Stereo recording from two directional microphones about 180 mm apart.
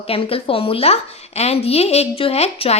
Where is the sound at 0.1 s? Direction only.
30° left (ahead or behind).